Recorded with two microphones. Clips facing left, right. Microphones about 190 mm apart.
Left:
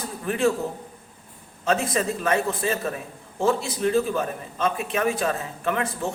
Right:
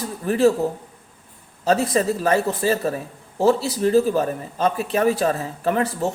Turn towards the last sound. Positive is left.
turn(degrees=-35)  # may be behind; listen again after turning